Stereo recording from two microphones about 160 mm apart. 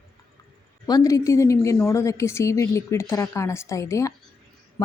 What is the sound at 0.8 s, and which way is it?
A woman's voice, 20° left (ahead or behind).